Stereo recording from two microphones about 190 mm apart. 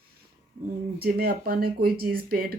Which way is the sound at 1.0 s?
55° right (ahead or behind).